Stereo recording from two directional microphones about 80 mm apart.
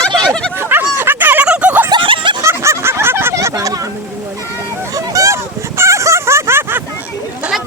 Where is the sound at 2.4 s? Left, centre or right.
Right.